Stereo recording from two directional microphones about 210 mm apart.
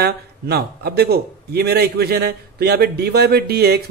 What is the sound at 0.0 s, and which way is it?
A man's voice, 50° right (ahead or behind).